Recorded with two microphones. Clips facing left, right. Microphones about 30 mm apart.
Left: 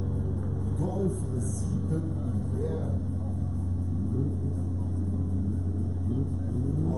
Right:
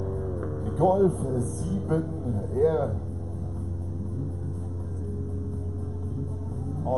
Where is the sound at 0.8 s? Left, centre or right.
Right.